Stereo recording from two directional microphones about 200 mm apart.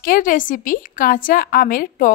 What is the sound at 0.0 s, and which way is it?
A woman's voice, 45° left (ahead or behind).